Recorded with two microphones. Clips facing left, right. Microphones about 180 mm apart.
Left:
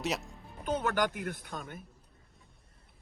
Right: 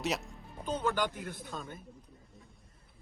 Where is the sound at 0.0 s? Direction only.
Centre (ahead or behind).